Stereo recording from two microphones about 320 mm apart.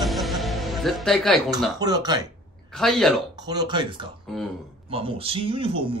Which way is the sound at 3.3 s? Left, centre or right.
Centre.